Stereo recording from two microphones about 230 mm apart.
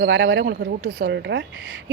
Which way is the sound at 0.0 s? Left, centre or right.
Right.